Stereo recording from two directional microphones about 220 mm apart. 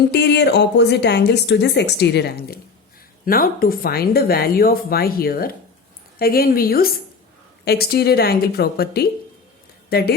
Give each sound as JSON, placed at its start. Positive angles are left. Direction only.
{"t": 0.1, "sound": "a woman's voice", "side_deg": 50}